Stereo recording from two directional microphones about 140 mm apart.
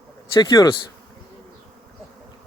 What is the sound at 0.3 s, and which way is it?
Speech, 30° left (ahead or behind).